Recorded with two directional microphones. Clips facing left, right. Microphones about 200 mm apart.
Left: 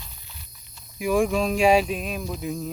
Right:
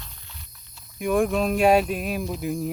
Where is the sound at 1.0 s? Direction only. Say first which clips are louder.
Even; centre (ahead or behind).